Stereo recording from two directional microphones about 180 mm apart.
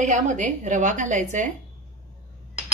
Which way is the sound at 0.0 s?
45° right (ahead or behind).